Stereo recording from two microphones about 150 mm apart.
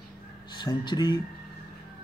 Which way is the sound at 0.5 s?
30° left (ahead or behind).